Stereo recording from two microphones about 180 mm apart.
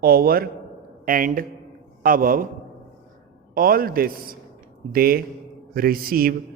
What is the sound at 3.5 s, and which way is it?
A man's voice, 55° right (ahead or behind).